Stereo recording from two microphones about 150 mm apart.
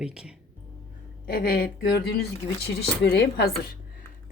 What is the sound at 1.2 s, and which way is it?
Speech, 85° left.